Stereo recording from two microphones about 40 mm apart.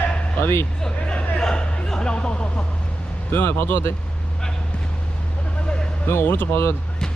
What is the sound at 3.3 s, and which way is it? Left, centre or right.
Speech, left.